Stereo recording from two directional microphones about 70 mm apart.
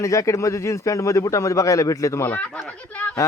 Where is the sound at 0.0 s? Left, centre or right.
Left.